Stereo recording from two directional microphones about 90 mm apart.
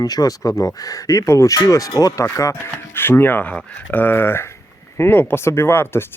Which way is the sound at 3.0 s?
25° left (ahead or behind).